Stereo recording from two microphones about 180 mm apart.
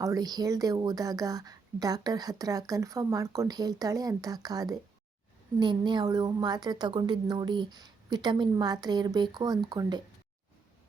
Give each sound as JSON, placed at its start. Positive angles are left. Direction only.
{"t": 0.0, "sound": "speech", "side_deg": -20}